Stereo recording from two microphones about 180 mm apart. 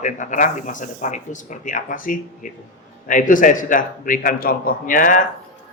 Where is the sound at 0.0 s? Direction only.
45° left (ahead or behind).